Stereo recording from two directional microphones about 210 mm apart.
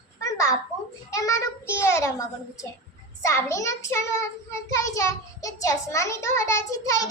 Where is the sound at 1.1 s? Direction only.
15° left (ahead or behind).